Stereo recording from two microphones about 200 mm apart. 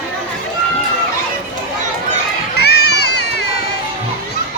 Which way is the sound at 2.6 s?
55° left (ahead or behind).